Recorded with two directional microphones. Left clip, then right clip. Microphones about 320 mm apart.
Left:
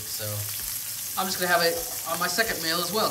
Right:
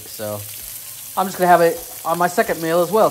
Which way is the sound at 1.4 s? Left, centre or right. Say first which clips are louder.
Right 10 dB; centre.